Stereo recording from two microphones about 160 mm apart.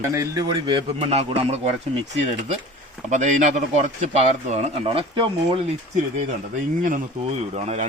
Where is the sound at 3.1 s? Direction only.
50° right (ahead or behind); by 5.6 s 35° right (ahead or behind).